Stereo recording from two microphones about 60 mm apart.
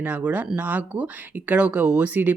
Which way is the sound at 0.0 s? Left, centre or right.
Right.